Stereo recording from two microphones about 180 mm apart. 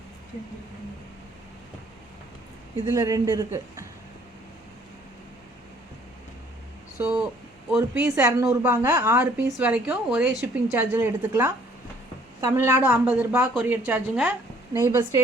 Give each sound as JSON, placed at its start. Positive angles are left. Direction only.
{"t": 2.9, "sound": "speech", "side_deg": -20}
{"t": 7.0, "sound": "speech", "side_deg": -15}